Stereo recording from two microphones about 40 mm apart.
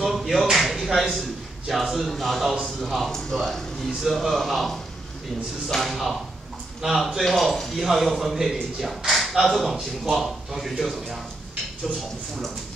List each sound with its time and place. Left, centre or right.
0.0 s chop: centre
0.7 s a sound: centre
1.7 s a man's voice: centre
4.0 s speech: centre
5.8 s a man's voice: centre